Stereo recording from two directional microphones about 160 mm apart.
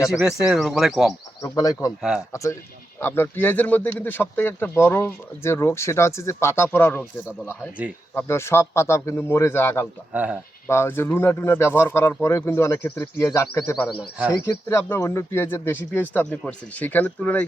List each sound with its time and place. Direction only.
0.2 s speech: 5° right (ahead or behind)
1.4 s speech: 20° left (ahead or behind)
2.0 s speech: 5° right (ahead or behind)
2.3 s speech: 20° left (ahead or behind)
8.1 s speech: 15° left (ahead or behind)
10.1 s speech: 10° right (ahead or behind)
10.7 s speech: 15° left (ahead or behind)
14.4 s speech: 15° left (ahead or behind)